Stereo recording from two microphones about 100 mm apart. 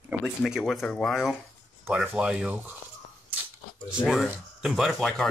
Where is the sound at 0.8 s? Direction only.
10° left (ahead or behind).